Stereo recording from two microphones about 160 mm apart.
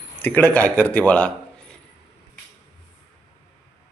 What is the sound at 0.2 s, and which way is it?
Speech, 10° left (ahead or behind).